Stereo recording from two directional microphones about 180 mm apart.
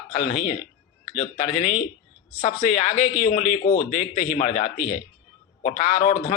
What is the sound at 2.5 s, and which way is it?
Speech, 40° left (ahead or behind).